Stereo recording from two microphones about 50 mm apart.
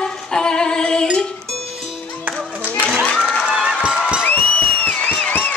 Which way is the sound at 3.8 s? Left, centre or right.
Centre.